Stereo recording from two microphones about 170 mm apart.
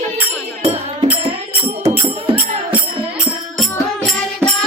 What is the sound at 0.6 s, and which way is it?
Music, 35° right (ahead or behind).